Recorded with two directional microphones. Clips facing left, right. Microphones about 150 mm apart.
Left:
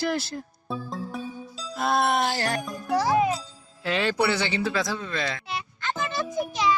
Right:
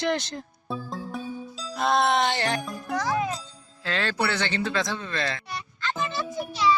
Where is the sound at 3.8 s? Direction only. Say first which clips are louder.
Left 3 dB; 15° left (ahead or behind).